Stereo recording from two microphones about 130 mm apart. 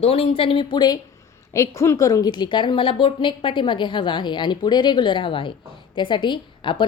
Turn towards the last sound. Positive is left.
turn(degrees=40)  # may be behind; listen again after turning